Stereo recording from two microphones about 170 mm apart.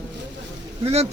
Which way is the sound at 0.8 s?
40° right (ahead or behind).